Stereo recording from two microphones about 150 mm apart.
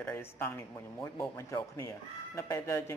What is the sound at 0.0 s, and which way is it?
A man's voice, 15° left (ahead or behind).